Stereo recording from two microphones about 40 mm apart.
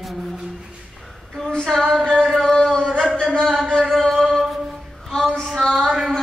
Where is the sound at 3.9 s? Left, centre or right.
Centre.